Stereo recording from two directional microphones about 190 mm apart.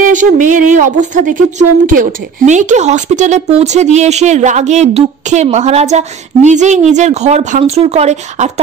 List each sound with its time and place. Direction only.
0.0 s speech: 45° right (ahead or behind)